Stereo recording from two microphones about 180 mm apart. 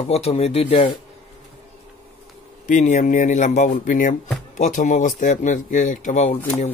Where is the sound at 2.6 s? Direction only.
45° left (ahead or behind).